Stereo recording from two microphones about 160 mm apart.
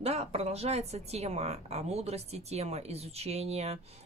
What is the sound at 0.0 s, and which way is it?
A woman's voice, 40° right (ahead or behind).